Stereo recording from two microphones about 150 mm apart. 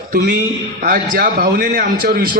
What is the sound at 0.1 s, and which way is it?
Speech, 90° right.